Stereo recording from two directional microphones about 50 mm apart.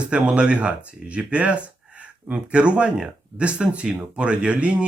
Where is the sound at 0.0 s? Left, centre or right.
Right.